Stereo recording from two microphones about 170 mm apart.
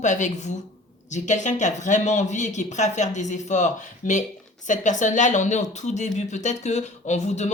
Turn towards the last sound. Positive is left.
turn(degrees=40)  # may be behind; listen again after turning